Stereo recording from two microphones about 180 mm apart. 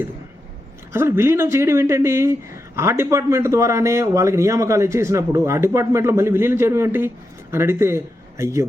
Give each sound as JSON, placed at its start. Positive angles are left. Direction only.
{"t": 0.9, "sound": "a man's voice", "side_deg": -15}